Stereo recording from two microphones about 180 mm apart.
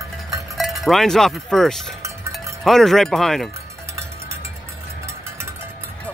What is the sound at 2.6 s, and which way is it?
Speech, centre (ahead or behind).